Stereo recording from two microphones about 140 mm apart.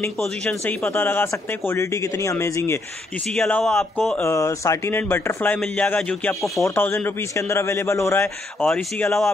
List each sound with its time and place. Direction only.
0.2 s speech: 5° left (ahead or behind)
3.3 s speech: 5° left (ahead or behind)
4.2 s speech: 20° left (ahead or behind); by 6.6 s 5° left (ahead or behind)
6.6 s speech: 15° left (ahead or behind)
8.6 s speech: 10° left (ahead or behind)